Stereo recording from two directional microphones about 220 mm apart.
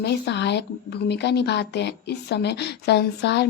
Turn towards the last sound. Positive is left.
turn(degrees=50)  # may be behind; listen again after turning